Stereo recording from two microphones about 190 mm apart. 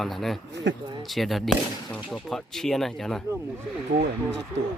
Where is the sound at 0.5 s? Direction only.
65° right (ahead or behind).